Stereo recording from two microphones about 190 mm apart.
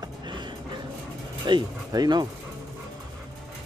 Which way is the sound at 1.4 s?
20° right (ahead or behind).